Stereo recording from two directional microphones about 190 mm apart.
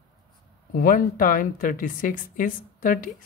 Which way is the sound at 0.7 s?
45° left (ahead or behind).